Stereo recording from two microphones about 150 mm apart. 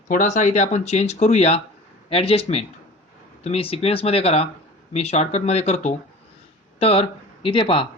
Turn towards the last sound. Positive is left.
turn(degrees=35)  # may be behind; listen again after turning